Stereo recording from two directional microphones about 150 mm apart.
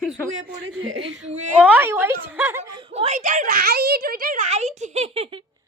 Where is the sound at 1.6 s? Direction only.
10° right (ahead or behind).